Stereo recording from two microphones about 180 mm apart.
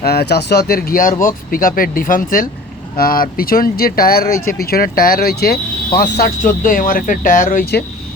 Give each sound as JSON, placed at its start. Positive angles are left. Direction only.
{"t": 0.0, "sound": "speech", "side_deg": 60}